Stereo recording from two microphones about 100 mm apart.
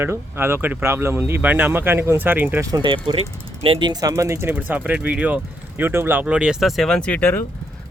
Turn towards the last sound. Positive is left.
turn(degrees=20)  # may be behind; listen again after turning